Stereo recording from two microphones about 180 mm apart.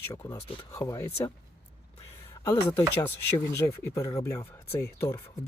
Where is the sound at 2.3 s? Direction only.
20° left (ahead or behind).